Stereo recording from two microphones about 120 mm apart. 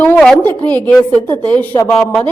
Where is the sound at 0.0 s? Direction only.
10° left (ahead or behind).